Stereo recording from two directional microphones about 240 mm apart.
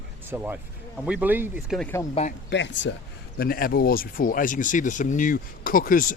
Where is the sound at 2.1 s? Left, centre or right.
Left.